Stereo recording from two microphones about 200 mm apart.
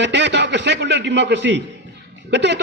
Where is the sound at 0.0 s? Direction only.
60° right (ahead or behind).